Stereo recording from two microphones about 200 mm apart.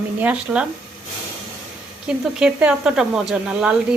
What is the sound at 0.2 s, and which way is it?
Speech, 5° right (ahead or behind).